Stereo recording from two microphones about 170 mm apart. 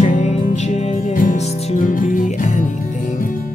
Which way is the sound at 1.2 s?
55° left (ahead or behind).